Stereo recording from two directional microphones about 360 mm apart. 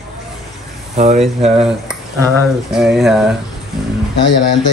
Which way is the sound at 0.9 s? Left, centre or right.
Centre.